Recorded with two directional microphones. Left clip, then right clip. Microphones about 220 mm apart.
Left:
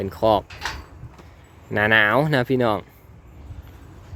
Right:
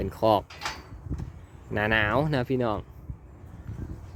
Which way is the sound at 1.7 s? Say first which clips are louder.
Left 8 dB; 10° left (ahead or behind).